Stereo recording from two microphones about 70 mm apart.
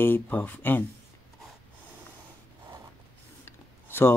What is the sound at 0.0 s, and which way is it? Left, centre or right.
Speech, left.